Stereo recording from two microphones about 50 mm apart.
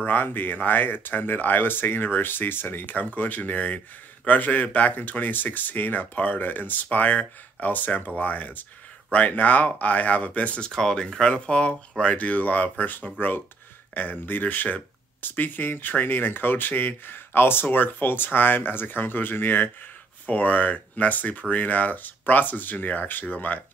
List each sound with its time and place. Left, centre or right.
0.0 s speech: left
10.6 s speech: centre; by 23.6 s left